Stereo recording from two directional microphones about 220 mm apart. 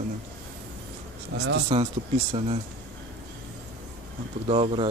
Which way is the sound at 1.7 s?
25° right (ahead or behind).